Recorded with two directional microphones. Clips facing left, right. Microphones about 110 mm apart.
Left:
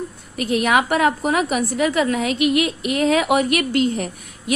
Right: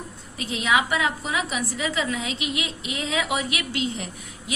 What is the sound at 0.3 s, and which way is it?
Speech, 60° left (ahead or behind).